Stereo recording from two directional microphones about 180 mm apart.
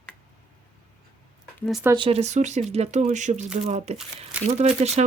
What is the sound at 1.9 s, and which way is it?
Speech, 30° right (ahead or behind).